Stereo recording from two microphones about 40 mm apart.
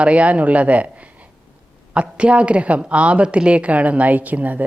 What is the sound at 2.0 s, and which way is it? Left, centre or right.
A woman's voice, right.